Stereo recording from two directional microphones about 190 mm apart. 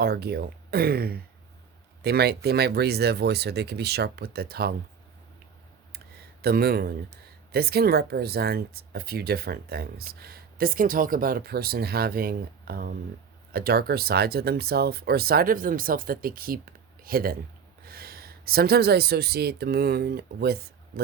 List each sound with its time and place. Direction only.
0.0 s speech: 55° right (ahead or behind)
6.4 s speech: 55° right (ahead or behind)